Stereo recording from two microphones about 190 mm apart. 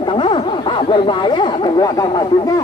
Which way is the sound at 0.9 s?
25° left (ahead or behind).